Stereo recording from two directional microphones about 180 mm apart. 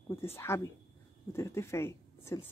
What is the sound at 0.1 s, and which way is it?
A woman's voice, 15° left (ahead or behind).